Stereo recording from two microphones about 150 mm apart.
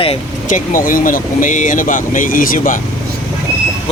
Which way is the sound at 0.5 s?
65° left (ahead or behind).